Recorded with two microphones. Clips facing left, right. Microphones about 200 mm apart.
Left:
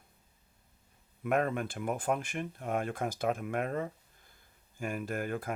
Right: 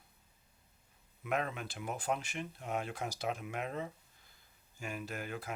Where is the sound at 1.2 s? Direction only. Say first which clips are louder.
Left 6 dB; 50° left (ahead or behind).